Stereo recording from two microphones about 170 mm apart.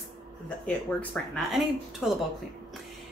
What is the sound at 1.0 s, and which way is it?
A woman's voice, centre (ahead or behind).